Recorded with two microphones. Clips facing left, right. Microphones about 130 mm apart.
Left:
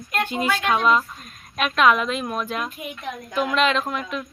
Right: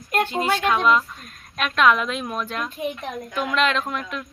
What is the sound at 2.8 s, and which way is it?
Speech, 30° right (ahead or behind).